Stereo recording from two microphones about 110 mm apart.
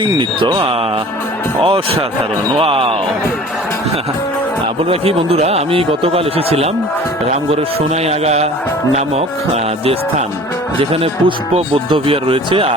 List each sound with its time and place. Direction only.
0.0 s speech: 45° right (ahead or behind)
4.8 s speech: 60° right (ahead or behind)
8.0 s music: 75° right (ahead or behind)
9.8 s speech: 60° right (ahead or behind)